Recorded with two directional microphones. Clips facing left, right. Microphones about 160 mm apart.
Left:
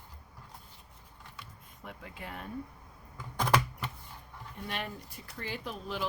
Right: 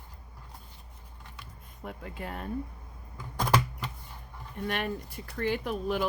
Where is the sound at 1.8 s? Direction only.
45° right (ahead or behind).